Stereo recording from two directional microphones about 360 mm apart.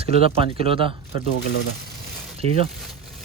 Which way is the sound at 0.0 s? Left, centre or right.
Centre.